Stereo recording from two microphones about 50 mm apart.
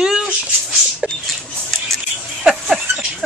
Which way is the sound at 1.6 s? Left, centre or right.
Centre.